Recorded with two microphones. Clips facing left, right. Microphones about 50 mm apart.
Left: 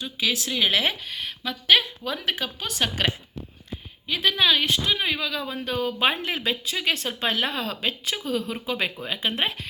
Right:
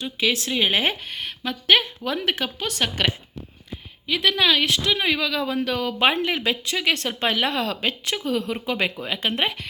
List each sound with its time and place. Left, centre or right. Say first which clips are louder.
0.0 s speech: right 3 dB; right
2.3 s speech: right 3 dB; right
4.0 s speech: right 2 dB; right